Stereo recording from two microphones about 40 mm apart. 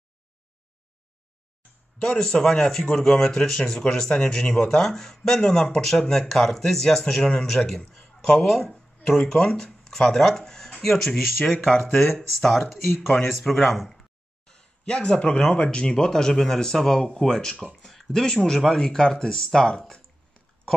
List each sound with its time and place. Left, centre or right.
2.0 s speech: centre
12.6 s speech: centre
13.1 s speech: centre
14.5 s speech: left